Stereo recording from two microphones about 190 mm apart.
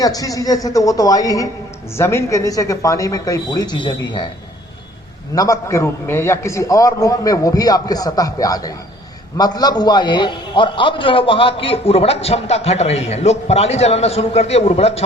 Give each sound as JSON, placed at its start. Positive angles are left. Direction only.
{"t": 0.0, "sound": "a woman's voice", "side_deg": 20}
{"t": 5.3, "sound": "a man's voice", "side_deg": 15}